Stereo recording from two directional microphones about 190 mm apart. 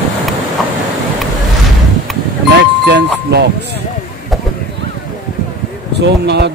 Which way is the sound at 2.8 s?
60° right (ahead or behind).